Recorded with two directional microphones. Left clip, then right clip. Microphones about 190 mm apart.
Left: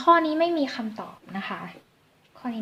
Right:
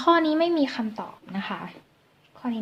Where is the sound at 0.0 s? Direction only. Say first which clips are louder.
Left 1 dB; 30° right (ahead or behind).